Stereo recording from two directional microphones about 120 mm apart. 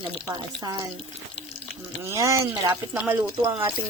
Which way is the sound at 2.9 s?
15° right (ahead or behind).